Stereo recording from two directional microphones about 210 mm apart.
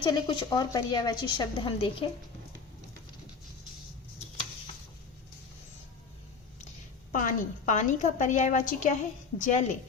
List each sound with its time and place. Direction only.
0.0 s speech: 20° left (ahead or behind)
7.1 s a woman's voice: 40° left (ahead or behind)